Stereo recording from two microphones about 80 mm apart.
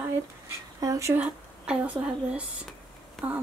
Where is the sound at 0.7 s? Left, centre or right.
Right.